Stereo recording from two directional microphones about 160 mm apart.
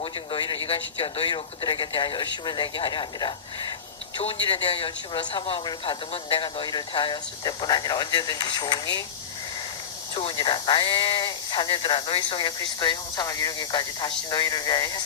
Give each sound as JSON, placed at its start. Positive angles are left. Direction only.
{"t": 0.0, "sound": "speech", "side_deg": 30}
{"t": 10.2, "sound": "speech", "side_deg": 30}